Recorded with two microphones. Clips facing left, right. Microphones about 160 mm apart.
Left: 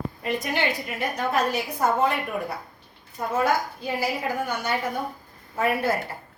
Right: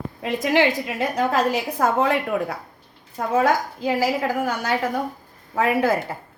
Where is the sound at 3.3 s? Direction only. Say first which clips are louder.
Right 4 dB; 90° right.